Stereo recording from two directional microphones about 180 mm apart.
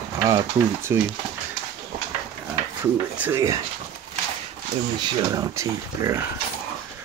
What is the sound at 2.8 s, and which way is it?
Speech, 10° right (ahead or behind).